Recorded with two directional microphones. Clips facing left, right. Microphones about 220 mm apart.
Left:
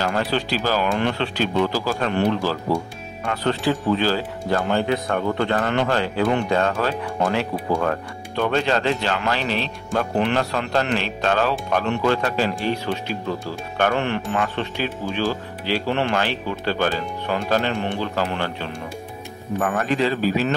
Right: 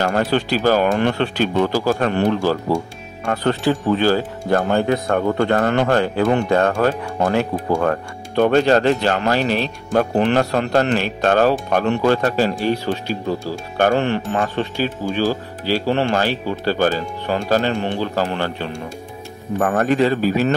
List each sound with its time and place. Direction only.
0.0 s speech: 50° right (ahead or behind)